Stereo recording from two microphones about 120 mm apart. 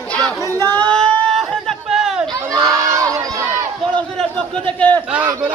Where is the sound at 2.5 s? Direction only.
30° right (ahead or behind).